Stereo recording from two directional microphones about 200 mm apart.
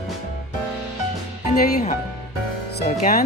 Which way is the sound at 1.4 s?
35° left (ahead or behind).